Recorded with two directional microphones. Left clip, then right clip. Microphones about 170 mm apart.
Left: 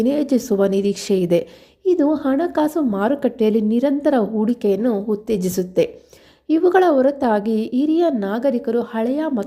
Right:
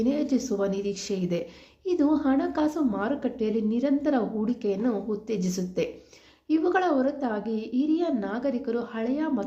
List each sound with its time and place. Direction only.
0.0 s a woman's voice: 45° left (ahead or behind)